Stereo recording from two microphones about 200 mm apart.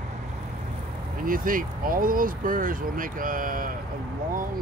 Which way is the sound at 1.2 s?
45° right (ahead or behind).